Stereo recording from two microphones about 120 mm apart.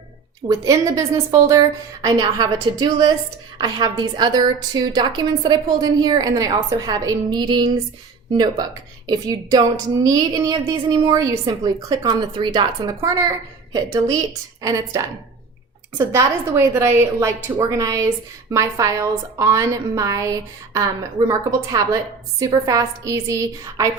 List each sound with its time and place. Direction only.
0.4 s a woman's voice: 30° right (ahead or behind)